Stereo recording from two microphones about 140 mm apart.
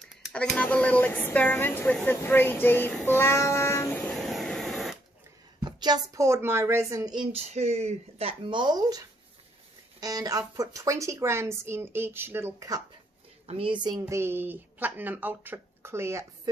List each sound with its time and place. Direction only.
0.3 s speech: 5° left (ahead or behind)
3.1 s a sound: 15° left (ahead or behind); by 4.9 s centre (ahead or behind)
5.6 s a woman's voice: 30° right (ahead or behind)
7.2 s a woman's voice: 50° right (ahead or behind); by 12.8 s 25° right (ahead or behind)
13.5 s a woman's voice: 40° right (ahead or behind); by 16.3 s 20° right (ahead or behind)